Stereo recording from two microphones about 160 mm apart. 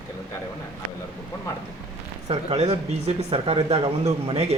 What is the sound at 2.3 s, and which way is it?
Speech, 40° right (ahead or behind).